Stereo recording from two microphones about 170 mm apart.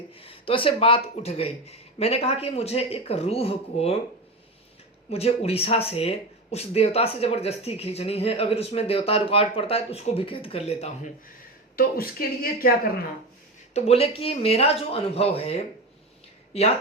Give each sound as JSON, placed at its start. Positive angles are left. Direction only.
{"t": 0.1, "sound": "speech", "side_deg": 35}
{"t": 5.0, "sound": "speech", "side_deg": 35}
{"t": 11.8, "sound": "speech", "side_deg": 60}
{"t": 13.7, "sound": "speech", "side_deg": 35}